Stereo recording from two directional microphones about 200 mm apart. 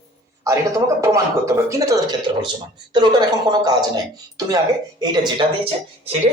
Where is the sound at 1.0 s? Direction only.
15° right (ahead or behind).